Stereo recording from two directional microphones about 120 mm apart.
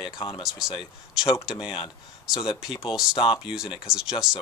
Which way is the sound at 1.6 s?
45° left (ahead or behind).